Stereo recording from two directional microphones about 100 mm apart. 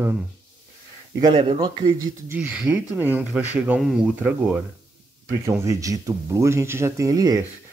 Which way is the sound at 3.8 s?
Centre (ahead or behind).